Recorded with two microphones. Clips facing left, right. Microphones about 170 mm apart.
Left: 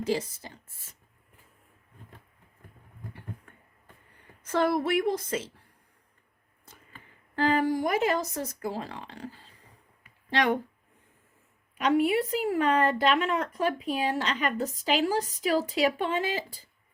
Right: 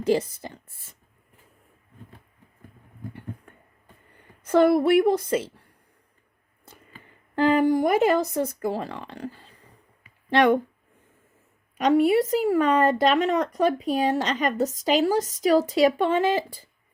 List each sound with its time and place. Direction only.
0.0 s speech: 55° right (ahead or behind)
4.4 s speech: 60° right (ahead or behind)
7.3 s speech: 55° right (ahead or behind)
11.8 s speech: 40° right (ahead or behind)